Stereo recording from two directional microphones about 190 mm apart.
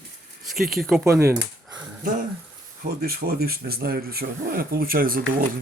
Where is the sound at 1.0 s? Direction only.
15° right (ahead or behind).